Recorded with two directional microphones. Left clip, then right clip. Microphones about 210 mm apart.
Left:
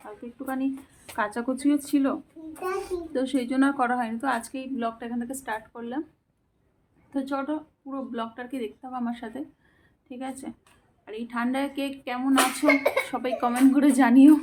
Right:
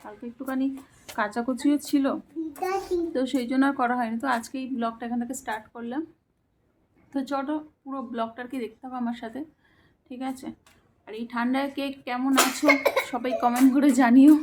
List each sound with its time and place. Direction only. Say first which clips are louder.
0.0 s speech: right 1 dB; 5° right (ahead or behind)
7.1 s speech: right 1 dB; 5° right (ahead or behind)
12.6 s speech: right 2 dB; 55° right (ahead or behind)
13.1 s speech: right 2 dB; centre (ahead or behind)